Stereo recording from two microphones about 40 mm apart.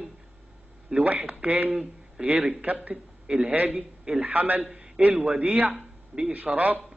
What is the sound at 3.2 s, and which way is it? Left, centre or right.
A man's voice, right.